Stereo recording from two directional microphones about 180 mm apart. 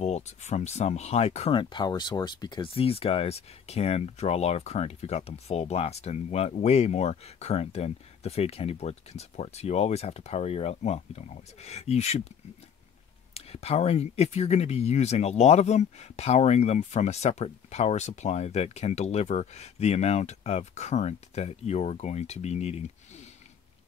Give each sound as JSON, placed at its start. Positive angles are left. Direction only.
{"t": 0.0, "sound": "speech", "side_deg": 40}
{"t": 13.3, "sound": "speech", "side_deg": 35}